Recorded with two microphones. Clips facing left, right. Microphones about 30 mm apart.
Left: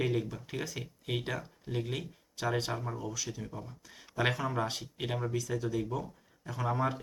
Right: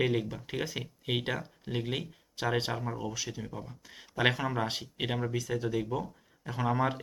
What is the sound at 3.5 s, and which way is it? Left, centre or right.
Speech, centre.